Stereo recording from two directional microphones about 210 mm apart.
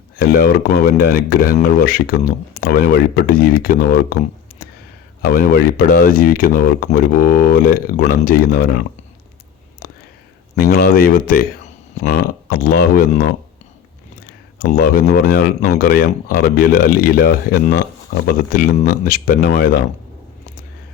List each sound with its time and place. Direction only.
0.2 s speech: 45° left (ahead or behind)
5.2 s speech: 45° left (ahead or behind)
9.8 s whispering: 45° left (ahead or behind)
10.5 s speech: 45° left (ahead or behind)
14.6 s speech: 45° left (ahead or behind)